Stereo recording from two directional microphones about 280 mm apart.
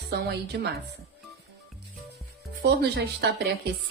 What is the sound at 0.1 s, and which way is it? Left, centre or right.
Speech, right.